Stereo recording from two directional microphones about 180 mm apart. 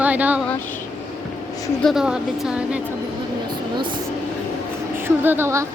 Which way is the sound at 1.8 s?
Centre (ahead or behind).